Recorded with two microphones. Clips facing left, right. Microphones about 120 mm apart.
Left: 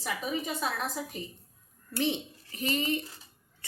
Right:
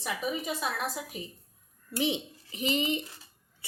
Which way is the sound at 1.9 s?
15° right (ahead or behind).